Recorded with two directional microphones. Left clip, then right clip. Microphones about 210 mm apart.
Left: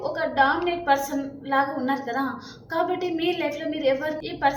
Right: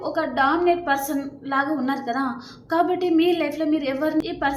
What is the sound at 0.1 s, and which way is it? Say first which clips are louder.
A woman's voice: right 1 dB; 35° right (ahead or behind).